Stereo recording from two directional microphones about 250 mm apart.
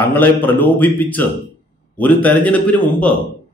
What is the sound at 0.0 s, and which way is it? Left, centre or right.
A man's voice, centre.